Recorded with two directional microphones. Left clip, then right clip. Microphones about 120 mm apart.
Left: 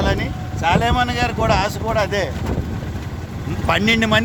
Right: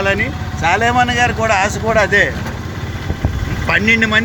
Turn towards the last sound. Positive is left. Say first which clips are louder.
# right 4 dB
turn(degrees=30)  # may be behind; listen again after turning